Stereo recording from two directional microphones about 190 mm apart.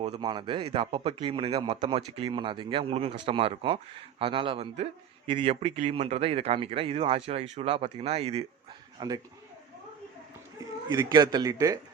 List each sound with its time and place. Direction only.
0.2 s a man's voice: 25° right (ahead or behind)
9.0 s speech: 20° right (ahead or behind)
10.9 s speech: 20° right (ahead or behind)